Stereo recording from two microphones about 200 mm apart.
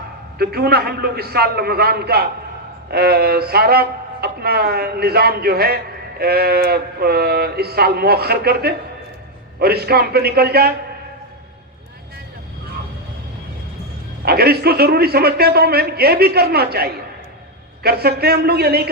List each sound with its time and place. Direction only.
0.3 s speech: 50° right (ahead or behind)
14.3 s speech: 50° right (ahead or behind)